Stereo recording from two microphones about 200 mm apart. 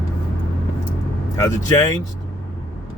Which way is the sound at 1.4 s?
15° left (ahead or behind).